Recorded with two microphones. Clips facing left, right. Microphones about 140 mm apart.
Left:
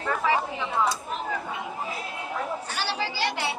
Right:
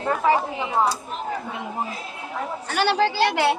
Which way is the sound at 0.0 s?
35° right (ahead or behind).